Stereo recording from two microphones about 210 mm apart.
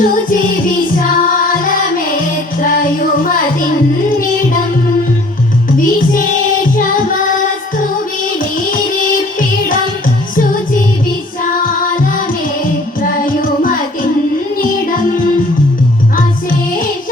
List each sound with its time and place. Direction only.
0.0 s music: 40° left (ahead or behind)
13.0 s music: 40° left (ahead or behind)